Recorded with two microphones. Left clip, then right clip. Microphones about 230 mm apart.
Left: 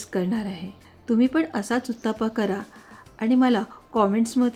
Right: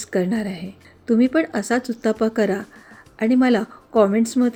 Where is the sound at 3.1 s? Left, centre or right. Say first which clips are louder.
Right 3 dB; centre.